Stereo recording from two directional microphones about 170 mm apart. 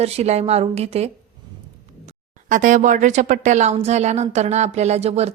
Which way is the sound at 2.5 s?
50° right (ahead or behind).